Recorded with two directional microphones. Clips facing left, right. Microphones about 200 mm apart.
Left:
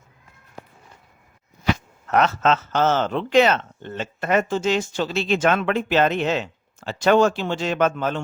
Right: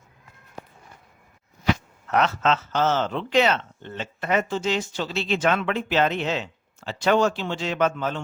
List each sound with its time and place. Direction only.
2.0 s speech: 45° left (ahead or behind)